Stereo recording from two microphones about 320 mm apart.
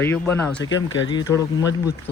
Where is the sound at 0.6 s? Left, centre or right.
Left.